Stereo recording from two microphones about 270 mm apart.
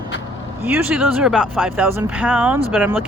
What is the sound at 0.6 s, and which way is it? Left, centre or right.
Speech, centre.